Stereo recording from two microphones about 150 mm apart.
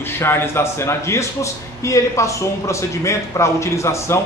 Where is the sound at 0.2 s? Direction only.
15° left (ahead or behind).